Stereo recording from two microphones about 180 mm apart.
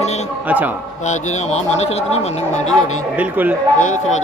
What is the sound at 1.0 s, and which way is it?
Speech, 40° left (ahead or behind).